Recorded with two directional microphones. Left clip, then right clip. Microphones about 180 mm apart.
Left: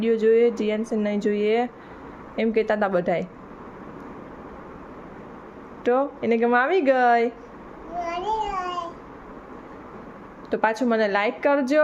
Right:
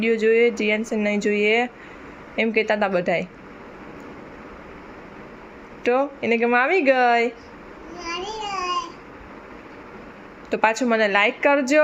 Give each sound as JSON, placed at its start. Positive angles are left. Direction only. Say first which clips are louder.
{"t": 0.0, "sound": "speech", "louder": "right 1 dB", "side_deg": 5}
{"t": 5.8, "sound": "speech", "louder": "right 1 dB", "side_deg": 5}
{"t": 8.0, "sound": "a sound", "louder": "left 3 dB", "side_deg": 15}
{"t": 10.5, "sound": "speech", "louder": "right 2 dB", "side_deg": 0}